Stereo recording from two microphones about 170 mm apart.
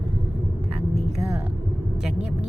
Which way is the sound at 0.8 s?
40° right (ahead or behind).